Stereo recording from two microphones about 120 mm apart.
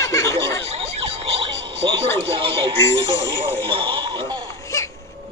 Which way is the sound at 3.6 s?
45° right (ahead or behind).